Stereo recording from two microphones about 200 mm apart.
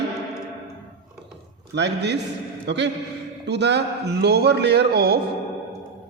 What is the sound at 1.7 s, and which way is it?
Speech, 60° right (ahead or behind).